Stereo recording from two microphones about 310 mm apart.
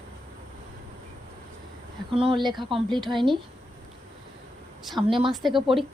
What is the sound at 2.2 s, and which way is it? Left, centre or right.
Speech, centre.